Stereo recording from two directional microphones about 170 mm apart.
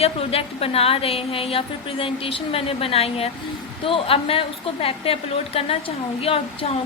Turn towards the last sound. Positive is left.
turn(degrees=35)  # may be behind; listen again after turning